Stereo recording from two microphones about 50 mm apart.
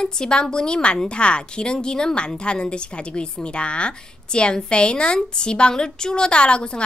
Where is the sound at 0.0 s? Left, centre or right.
Centre.